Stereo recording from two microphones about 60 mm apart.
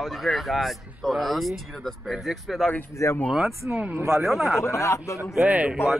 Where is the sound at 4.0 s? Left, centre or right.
Right.